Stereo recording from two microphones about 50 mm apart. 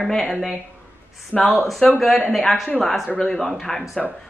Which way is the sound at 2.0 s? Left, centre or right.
Centre.